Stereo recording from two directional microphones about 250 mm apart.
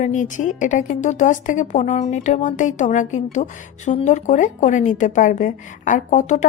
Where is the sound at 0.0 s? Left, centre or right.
Left.